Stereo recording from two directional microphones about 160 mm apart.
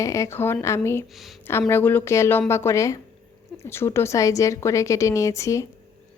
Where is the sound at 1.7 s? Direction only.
10° left (ahead or behind).